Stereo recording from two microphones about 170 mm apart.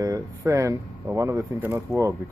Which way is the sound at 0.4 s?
20° right (ahead or behind).